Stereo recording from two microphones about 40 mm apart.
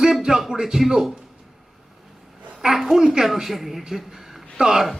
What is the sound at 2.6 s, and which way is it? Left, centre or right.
A woman's voice, centre.